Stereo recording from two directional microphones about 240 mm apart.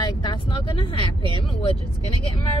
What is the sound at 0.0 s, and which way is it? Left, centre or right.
Vehicle, centre.